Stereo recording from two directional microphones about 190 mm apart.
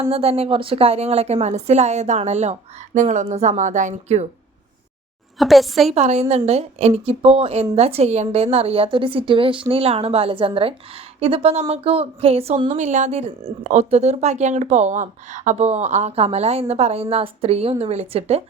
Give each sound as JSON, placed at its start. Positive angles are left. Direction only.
{"t": 0.0, "sound": "a woman's voice", "side_deg": -30}
{"t": 5.4, "sound": "a woman's voice", "side_deg": 0}
{"t": 5.9, "sound": "a woman's voice", "side_deg": -35}